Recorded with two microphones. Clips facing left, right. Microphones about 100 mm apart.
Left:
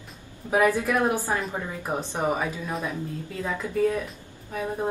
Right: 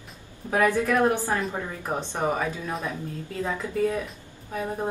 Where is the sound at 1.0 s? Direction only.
15° left (ahead or behind).